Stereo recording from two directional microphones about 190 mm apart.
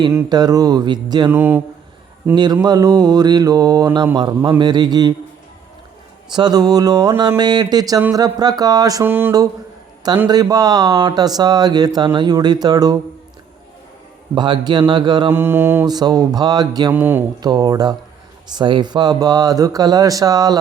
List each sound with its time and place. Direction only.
0.1 s speech: 15° right (ahead or behind)
1.3 s speech: 10° right (ahead or behind)
2.3 s speech: 25° right (ahead or behind)
6.3 s speech: 20° right (ahead or behind)
14.3 s speech: 25° right (ahead or behind)
17.0 s speech: 10° right (ahead or behind)